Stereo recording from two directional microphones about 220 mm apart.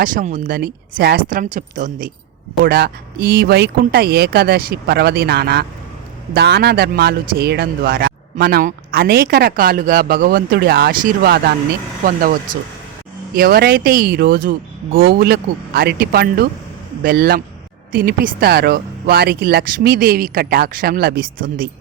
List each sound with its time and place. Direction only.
0.0 s speech: 35° right (ahead or behind)